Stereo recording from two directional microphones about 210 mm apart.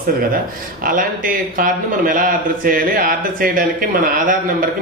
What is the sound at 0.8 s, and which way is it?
A man's voice, 40° right (ahead or behind).